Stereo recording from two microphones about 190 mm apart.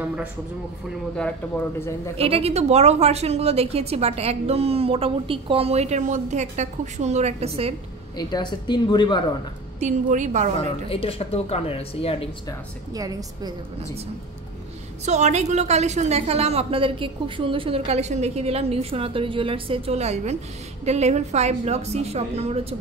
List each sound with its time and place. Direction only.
0.0 s a man's voice: 10° right (ahead or behind)
2.1 s a woman's voice: 30° right (ahead or behind)
8.2 s a woman's voice: 20° left (ahead or behind)
9.8 s a woman's voice: 40° right (ahead or behind)
10.6 s speech: 30° left (ahead or behind)
12.9 s a woman's voice: 20° right (ahead or behind)
15.0 s a woman's voice: 35° right (ahead or behind)